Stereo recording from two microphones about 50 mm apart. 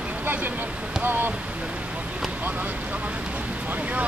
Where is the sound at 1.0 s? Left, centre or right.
Right.